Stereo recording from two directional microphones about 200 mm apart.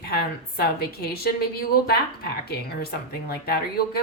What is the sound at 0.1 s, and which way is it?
A woman's voice, 50° left (ahead or behind).